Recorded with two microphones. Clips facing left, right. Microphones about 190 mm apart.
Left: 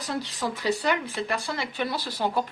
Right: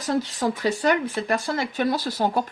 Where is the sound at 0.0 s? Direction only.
45° right (ahead or behind).